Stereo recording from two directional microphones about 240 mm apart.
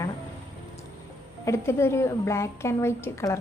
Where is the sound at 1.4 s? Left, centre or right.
Centre.